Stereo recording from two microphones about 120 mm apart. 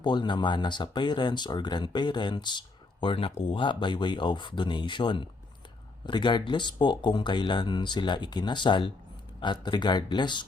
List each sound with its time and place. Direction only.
0.0 s speech: 40° left (ahead or behind)